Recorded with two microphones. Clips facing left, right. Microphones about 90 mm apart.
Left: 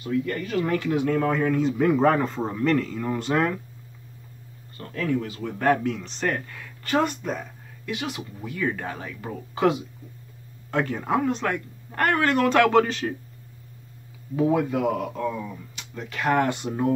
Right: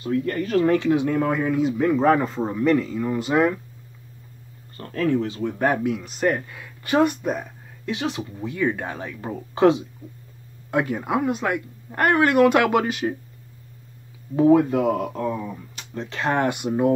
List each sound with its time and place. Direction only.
0.0 s speech: 35° right (ahead or behind)
0.7 s speech: 20° right (ahead or behind); by 3.5 s 5° right (ahead or behind)
4.7 s speech: 35° right (ahead or behind); by 7.4 s 15° right (ahead or behind)
7.8 s speech: 25° right (ahead or behind)
10.7 s speech: 15° right (ahead or behind)
14.3 s speech: 35° right (ahead or behind)
15.7 s a sound: 40° right (ahead or behind)
16.1 s speech: 25° right (ahead or behind)